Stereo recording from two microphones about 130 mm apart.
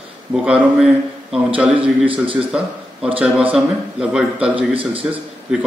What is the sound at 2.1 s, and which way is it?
Speech, 40° right (ahead or behind).